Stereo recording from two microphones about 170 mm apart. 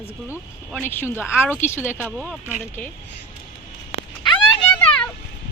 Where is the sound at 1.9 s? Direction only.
5° right (ahead or behind).